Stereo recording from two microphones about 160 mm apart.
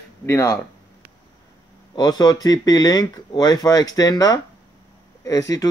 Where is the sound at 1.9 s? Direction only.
25° left (ahead or behind).